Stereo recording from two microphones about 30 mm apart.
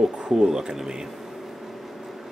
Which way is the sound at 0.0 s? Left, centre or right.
Centre.